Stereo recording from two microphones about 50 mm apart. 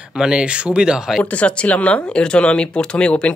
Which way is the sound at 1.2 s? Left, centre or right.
Left.